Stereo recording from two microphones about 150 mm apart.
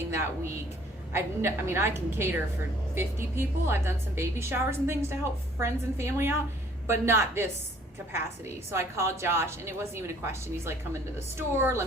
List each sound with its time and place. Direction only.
1.1 s a woman's voice: 15° right (ahead or behind)